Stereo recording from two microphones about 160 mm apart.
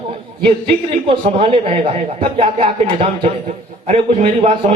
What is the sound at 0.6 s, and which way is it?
A man's voice, 35° right (ahead or behind).